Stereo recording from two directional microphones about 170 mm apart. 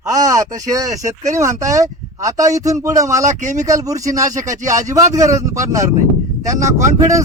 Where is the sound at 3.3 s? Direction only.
45° right (ahead or behind).